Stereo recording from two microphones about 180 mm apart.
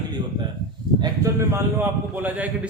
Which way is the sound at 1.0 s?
15° right (ahead or behind).